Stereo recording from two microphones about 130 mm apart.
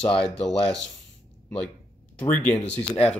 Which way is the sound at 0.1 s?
5° left (ahead or behind).